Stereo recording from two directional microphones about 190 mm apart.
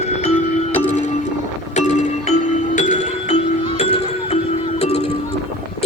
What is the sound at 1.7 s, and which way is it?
Music, 40° left (ahead or behind).